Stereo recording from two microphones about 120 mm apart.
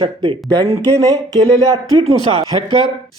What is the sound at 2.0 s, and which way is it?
Speech, 55° right (ahead or behind).